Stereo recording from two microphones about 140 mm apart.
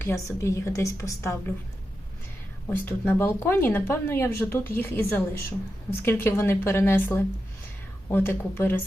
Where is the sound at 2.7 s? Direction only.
15° left (ahead or behind).